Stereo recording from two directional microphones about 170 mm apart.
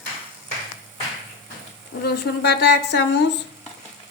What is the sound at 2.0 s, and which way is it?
Speech, 75° left (ahead or behind).